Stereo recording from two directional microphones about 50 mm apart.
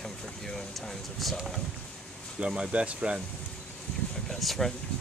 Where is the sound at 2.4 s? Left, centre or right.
Right.